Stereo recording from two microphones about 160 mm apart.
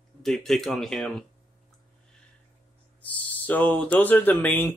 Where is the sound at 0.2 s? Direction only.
Centre (ahead or behind).